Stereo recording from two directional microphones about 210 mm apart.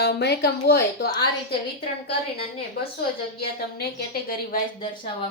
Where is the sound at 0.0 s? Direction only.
50° left (ahead or behind).